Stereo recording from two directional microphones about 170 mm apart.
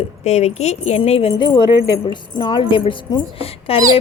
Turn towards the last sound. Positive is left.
turn(degrees=35)  # may be behind; listen again after turning